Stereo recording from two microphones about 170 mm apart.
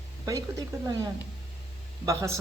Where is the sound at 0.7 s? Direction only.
20° right (ahead or behind).